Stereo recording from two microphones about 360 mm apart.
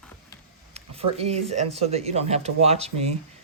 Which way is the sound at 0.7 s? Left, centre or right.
Centre.